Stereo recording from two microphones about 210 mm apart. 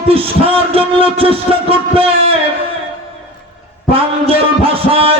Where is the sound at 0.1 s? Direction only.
25° right (ahead or behind).